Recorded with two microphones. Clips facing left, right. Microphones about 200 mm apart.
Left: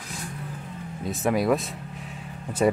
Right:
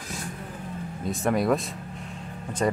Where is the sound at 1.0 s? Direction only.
Centre (ahead or behind).